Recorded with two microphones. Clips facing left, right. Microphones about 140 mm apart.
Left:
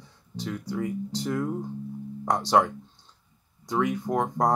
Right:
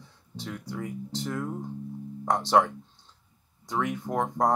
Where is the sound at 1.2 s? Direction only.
5° left (ahead or behind).